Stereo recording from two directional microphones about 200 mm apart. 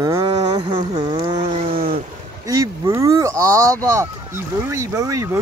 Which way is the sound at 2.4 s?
15° right (ahead or behind).